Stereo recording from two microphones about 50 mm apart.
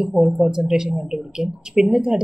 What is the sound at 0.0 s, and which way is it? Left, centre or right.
Speech, centre.